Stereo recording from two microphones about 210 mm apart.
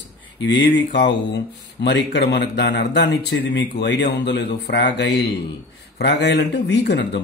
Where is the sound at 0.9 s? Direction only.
55° left (ahead or behind).